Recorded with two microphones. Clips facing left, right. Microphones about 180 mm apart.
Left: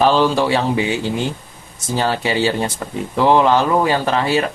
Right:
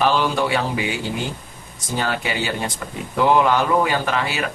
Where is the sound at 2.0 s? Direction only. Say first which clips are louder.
Left 6 dB; 30° left (ahead or behind).